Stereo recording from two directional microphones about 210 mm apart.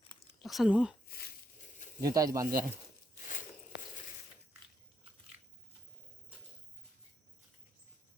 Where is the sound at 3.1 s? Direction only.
40° left (ahead or behind).